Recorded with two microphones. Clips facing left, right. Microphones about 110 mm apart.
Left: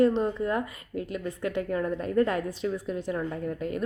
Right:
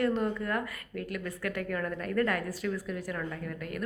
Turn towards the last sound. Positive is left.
turn(degrees=25)  # may be behind; listen again after turning